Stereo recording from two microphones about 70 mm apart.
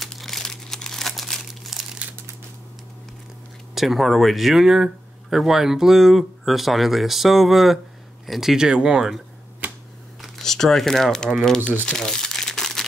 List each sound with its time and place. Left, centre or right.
0.0 s crumpling: centre
3.7 s speech: centre
9.6 s camera: right
10.2 s speech: centre
11.8 s crumpling: centre